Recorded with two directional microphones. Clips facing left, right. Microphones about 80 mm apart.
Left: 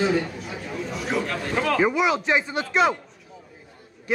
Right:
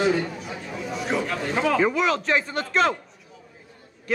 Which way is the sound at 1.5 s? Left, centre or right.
Centre.